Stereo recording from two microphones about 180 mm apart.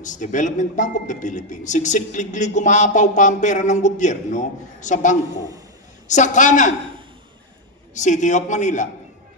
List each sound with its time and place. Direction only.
0.0 s a man's voice: 45° left (ahead or behind)
7.9 s a man's voice: 40° left (ahead or behind)